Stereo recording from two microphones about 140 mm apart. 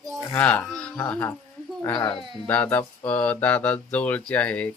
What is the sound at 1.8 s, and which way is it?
Speech, 25° left (ahead or behind).